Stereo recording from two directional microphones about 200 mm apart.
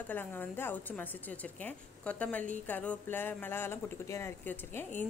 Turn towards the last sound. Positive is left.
turn(degrees=10)  # may be behind; listen again after turning